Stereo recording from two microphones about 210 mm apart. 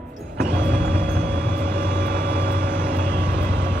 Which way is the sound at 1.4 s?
50° right (ahead or behind).